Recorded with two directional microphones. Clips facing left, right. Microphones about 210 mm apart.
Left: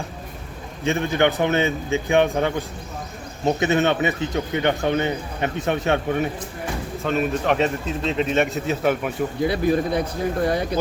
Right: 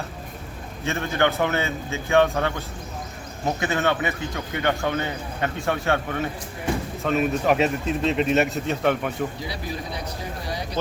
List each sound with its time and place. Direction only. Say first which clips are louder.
0.9 s a man's voice: left 3 dB; 15° left (ahead or behind)
7.0 s speech: left 1 dB; centre (ahead or behind)
9.4 s a man's voice: left 12 dB; 55° left (ahead or behind)